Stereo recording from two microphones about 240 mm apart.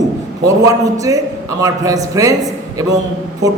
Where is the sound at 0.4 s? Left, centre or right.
Centre.